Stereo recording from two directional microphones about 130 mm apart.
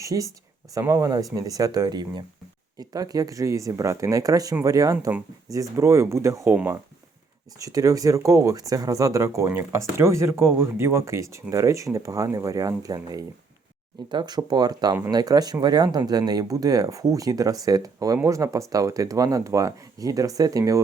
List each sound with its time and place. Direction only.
0.0 s speech: 25° right (ahead or behind)
7.6 s speech: 25° right (ahead or behind)